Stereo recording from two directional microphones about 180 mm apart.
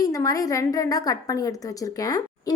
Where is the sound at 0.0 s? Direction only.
20° left (ahead or behind).